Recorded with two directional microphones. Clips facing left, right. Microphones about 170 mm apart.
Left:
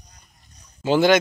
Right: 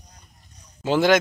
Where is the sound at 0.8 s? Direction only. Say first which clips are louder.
Left 2 dB; centre (ahead or behind).